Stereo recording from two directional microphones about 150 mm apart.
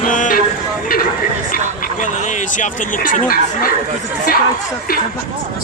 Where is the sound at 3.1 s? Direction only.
70° left (ahead or behind).